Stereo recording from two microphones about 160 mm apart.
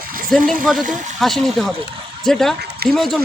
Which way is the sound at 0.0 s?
60° right (ahead or behind).